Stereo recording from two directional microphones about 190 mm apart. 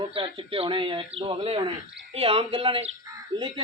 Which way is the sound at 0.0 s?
25° right (ahead or behind).